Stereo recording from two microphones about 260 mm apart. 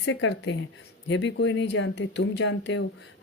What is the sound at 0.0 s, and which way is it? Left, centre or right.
Speech, left.